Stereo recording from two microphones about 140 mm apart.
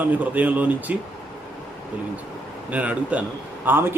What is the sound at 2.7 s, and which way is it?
A man's voice, 10° right (ahead or behind).